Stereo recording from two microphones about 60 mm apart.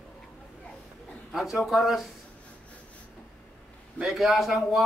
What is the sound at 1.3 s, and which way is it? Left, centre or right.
Speech, centre.